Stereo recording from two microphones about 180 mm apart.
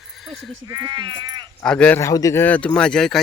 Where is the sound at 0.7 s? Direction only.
20° right (ahead or behind).